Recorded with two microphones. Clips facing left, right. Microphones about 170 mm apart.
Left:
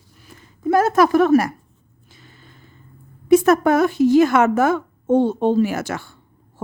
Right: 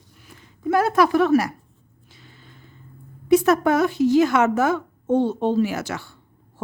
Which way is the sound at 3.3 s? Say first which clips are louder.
Left 3 dB; 50° left (ahead or behind).